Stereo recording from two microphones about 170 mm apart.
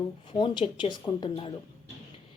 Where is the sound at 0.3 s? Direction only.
30° left (ahead or behind).